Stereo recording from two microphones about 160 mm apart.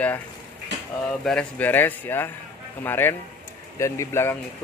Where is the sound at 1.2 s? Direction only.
5° left (ahead or behind).